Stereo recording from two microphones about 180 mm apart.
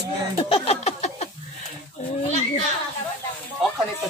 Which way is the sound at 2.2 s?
40° left (ahead or behind).